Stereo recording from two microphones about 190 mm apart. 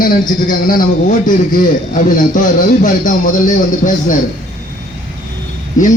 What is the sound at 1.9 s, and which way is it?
A man's voice, 45° left (ahead or behind).